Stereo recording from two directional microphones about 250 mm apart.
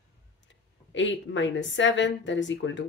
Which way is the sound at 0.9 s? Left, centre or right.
Left.